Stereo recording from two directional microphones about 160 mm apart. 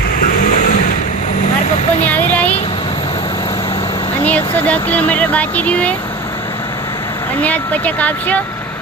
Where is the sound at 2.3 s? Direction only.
10° left (ahead or behind).